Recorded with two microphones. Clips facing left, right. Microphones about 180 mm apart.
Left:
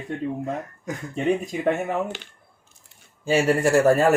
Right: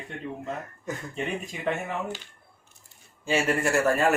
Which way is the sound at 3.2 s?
35° left (ahead or behind).